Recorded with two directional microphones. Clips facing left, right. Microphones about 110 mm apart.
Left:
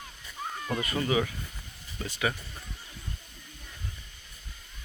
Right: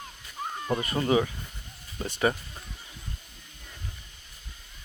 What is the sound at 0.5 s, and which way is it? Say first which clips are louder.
Speech: right 3 dB; 25° right (ahead or behind).